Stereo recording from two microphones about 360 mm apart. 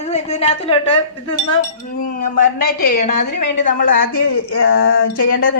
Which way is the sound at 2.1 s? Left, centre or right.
Left.